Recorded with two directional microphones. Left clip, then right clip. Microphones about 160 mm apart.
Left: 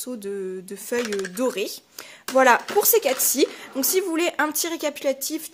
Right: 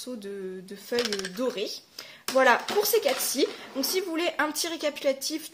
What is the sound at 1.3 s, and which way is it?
Speech, 45° left (ahead or behind).